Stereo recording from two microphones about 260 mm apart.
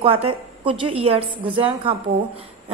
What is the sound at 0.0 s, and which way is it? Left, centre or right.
A woman's voice, right.